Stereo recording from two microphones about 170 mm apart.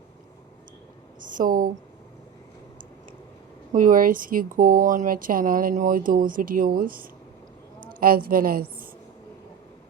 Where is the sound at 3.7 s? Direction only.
50° right (ahead or behind).